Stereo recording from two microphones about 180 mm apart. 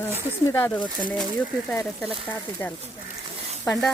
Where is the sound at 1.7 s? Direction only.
Centre (ahead or behind).